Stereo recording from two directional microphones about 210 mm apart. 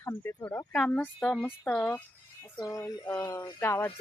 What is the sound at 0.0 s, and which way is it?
Speech, 10° left (ahead or behind).